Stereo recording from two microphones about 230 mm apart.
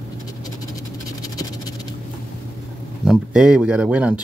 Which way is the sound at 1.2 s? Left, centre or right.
Centre.